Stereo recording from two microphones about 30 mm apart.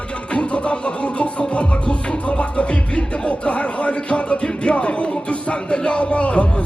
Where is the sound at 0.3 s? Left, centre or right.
Left.